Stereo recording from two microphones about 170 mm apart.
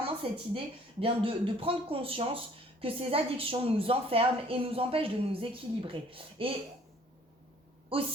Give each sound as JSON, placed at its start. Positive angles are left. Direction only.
{"t": 0.0, "sound": "a woman's voice", "side_deg": -30}
{"t": 7.9, "sound": "a woman's voice", "side_deg": -30}